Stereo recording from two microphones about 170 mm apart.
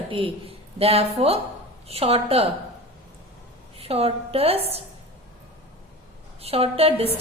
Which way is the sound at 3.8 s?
35° right (ahead or behind).